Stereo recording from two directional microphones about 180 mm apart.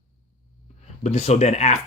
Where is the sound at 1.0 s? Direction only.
35° left (ahead or behind).